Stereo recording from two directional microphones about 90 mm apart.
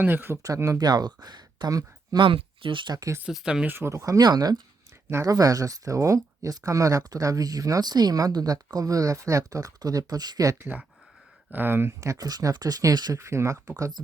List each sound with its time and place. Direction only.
0.0 s speech: 25° right (ahead or behind)
0.4 s speech: 35° right (ahead or behind)
2.1 s speech: 80° right; by 3.0 s 60° right (ahead or behind)
3.2 s speech: 10° right (ahead or behind)
3.7 s speech: 30° right (ahead or behind)
10.6 s speech: 20° right (ahead or behind); by 13.1 s 50° right (ahead or behind)
13.1 s speech: 30° right (ahead or behind)